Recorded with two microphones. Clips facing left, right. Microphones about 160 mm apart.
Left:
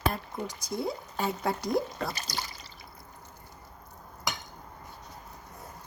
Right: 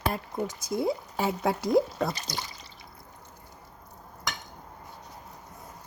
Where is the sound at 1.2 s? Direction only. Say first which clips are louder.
Right 1 dB; 5° right (ahead or behind).